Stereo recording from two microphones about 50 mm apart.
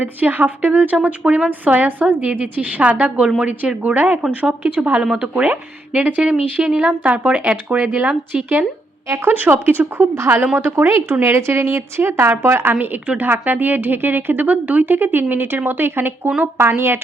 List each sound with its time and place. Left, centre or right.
0.0 s a woman's voice: right
0.9 s speech: right
1.5 s a woman's voice: right
6.6 s a woman's voice: centre
7.0 s speech: right
8.0 s speech: right
9.3 s a woman's voice: right
13.1 s a woman's voice: right